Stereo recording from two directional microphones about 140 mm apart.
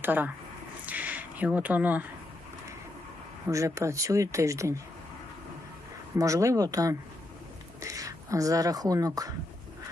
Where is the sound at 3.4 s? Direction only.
20° right (ahead or behind).